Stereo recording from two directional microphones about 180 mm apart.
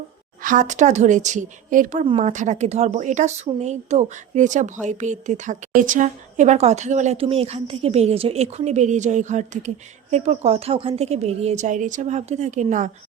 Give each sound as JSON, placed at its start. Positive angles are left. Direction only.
{"t": 0.4, "sound": "speech", "side_deg": -45}